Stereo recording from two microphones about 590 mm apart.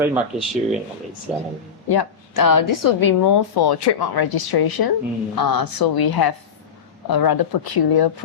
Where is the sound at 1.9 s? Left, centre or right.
Left.